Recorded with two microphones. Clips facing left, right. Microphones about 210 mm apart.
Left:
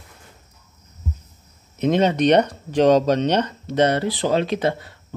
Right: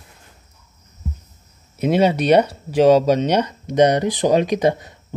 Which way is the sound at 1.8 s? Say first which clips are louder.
Right 1 dB; 10° right (ahead or behind).